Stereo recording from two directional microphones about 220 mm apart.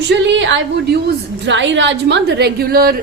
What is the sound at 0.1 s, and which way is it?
A woman's voice, 55° right (ahead or behind).